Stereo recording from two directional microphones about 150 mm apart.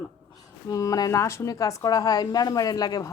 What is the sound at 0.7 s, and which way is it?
A woman's voice, 25° left (ahead or behind).